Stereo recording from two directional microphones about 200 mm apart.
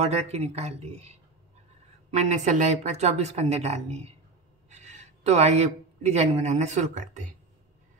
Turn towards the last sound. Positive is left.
turn(degrees=-40)  # may be behind; listen again after turning